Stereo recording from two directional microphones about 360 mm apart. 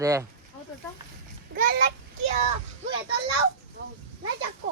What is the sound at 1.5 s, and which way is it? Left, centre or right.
Speech, right.